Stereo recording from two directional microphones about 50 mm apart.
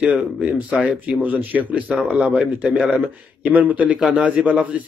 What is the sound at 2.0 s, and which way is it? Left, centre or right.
Speech, right.